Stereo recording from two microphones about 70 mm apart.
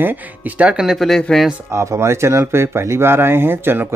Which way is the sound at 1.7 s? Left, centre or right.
Right.